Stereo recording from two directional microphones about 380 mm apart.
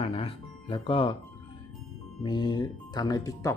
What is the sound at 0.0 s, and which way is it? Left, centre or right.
Music, centre.